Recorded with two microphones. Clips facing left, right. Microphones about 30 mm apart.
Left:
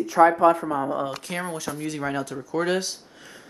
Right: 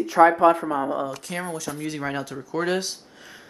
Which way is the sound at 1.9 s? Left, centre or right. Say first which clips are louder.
Left 1 dB; centre.